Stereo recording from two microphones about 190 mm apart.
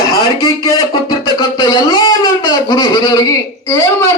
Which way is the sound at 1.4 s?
20° left (ahead or behind).